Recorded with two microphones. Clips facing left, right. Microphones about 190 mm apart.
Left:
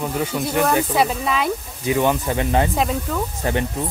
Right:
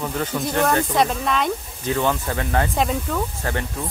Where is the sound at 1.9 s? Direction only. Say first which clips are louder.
Left 3 dB; 15° left (ahead or behind).